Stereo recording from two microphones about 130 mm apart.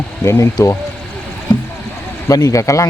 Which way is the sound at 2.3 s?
25° left (ahead or behind).